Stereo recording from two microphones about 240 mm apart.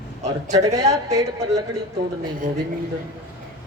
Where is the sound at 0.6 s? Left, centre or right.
Centre.